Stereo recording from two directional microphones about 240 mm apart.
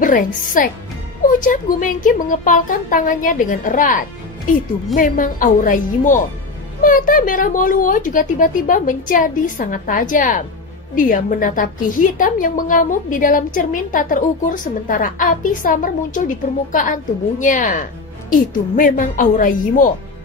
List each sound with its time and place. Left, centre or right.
0.0 s a woman's voice: left